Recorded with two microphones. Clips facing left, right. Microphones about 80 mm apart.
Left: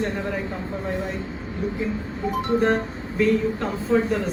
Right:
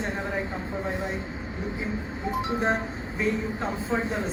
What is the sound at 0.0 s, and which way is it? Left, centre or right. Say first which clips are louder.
Speech: left 3 dB; right.